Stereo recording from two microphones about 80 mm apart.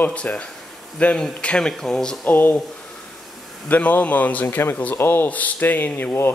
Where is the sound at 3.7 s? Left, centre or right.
Centre.